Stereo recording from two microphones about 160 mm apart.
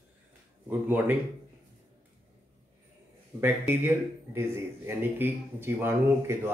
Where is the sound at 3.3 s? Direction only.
15° right (ahead or behind).